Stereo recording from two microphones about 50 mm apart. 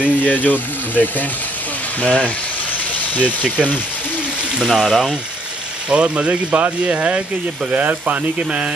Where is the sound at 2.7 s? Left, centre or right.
Left.